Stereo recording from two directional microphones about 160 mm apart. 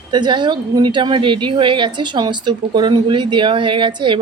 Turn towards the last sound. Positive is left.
turn(degrees=-30)  # may be behind; listen again after turning